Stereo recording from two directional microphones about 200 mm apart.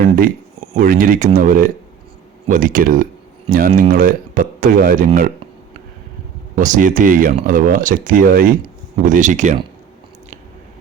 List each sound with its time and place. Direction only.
0.8 s speech: 45° right (ahead or behind)
6.6 s speech: 40° right (ahead or behind)